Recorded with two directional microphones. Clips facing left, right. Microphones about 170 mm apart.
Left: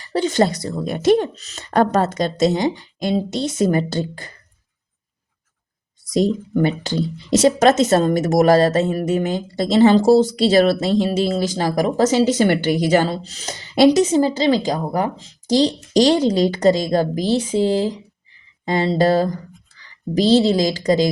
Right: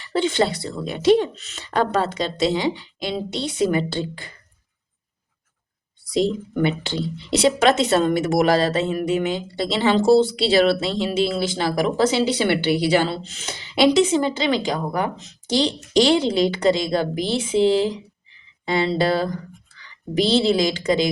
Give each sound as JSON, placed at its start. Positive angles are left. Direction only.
{"t": 0.0, "sound": "speech", "side_deg": 40}
{"t": 6.1, "sound": "speech", "side_deg": 40}